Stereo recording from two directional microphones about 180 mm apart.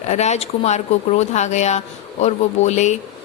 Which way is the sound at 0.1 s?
40° left (ahead or behind).